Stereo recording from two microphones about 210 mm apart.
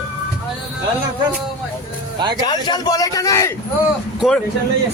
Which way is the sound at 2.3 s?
20° left (ahead or behind).